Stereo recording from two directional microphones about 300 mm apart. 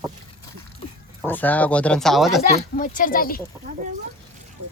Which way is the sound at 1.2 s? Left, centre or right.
Centre.